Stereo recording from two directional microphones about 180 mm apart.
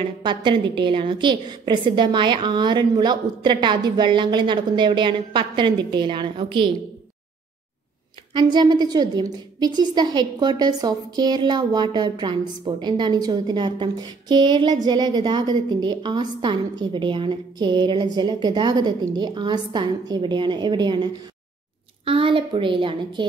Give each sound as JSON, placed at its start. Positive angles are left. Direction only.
{"t": 0.2, "sound": "a woman's voice", "side_deg": -25}
{"t": 8.3, "sound": "a woman's voice", "side_deg": -25}